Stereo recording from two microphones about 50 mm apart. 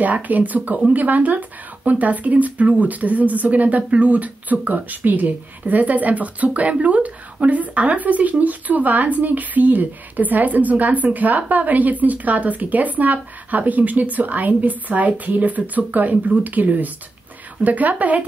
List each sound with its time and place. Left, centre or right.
0.0 s speech: right